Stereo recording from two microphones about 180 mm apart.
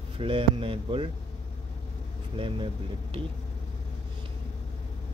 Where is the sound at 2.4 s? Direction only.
30° right (ahead or behind).